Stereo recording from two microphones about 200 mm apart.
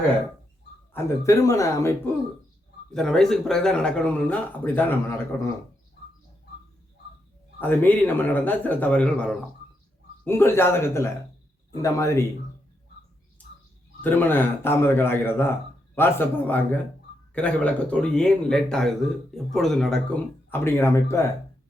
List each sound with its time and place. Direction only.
0.9 s a man's voice: 15° left (ahead or behind)
2.9 s speech: 5° left (ahead or behind)
7.6 s a man's voice: 10° left (ahead or behind)
14.0 s a man's voice: 10° left (ahead or behind)